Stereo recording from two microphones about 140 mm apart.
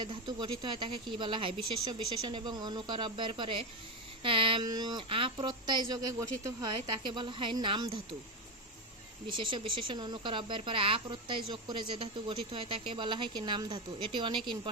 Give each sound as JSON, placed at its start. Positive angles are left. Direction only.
{"t": 0.0, "sound": "speech", "side_deg": -35}
{"t": 9.3, "sound": "speech", "side_deg": -35}